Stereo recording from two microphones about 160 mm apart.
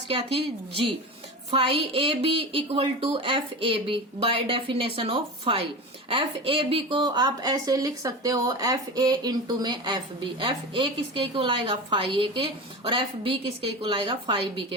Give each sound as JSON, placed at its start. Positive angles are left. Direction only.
{"t": 0.1, "sound": "a woman's voice", "side_deg": -35}